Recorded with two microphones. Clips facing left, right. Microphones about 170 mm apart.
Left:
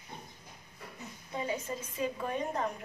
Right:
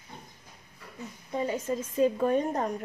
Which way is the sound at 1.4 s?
45° right (ahead or behind).